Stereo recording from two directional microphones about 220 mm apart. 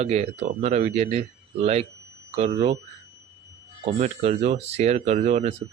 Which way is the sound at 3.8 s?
30° right (ahead or behind).